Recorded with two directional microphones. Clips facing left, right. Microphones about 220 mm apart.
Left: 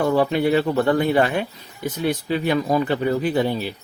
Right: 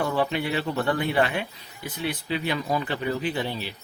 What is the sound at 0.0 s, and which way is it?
Speech, 40° left (ahead or behind).